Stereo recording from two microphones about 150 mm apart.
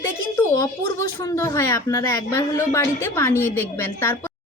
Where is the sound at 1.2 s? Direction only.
20° left (ahead or behind).